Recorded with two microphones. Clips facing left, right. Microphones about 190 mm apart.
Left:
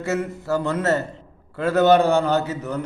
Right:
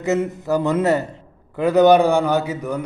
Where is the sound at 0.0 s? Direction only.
20° right (ahead or behind).